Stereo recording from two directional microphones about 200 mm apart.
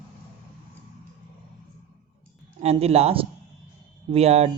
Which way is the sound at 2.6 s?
30° right (ahead or behind).